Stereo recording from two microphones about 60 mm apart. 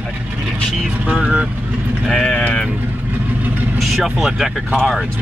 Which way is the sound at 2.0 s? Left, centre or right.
Centre.